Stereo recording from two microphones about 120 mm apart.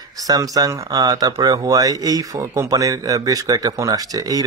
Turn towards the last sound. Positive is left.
turn(degrees=-30)  # may be behind; listen again after turning